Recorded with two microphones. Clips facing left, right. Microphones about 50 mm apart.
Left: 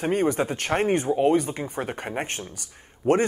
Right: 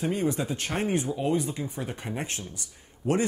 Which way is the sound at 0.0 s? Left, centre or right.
Left.